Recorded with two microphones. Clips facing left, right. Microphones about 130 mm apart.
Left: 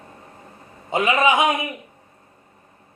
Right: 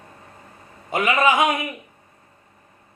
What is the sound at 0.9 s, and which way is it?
Speech, 20° left (ahead or behind).